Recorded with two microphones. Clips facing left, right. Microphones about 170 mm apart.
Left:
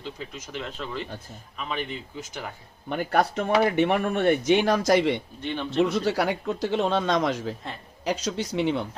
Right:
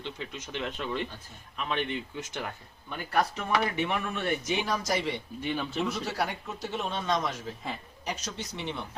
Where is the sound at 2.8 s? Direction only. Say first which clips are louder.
Left 5 dB; 65° left (ahead or behind); by 7.5 s 85° left.